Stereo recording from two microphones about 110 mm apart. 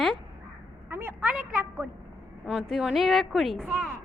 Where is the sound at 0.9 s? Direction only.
20° right (ahead or behind).